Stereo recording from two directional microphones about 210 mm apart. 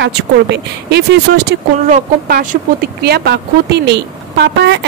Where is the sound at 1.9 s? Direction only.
40° right (ahead or behind).